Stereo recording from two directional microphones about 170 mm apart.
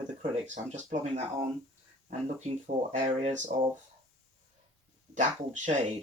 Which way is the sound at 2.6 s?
45° right (ahead or behind).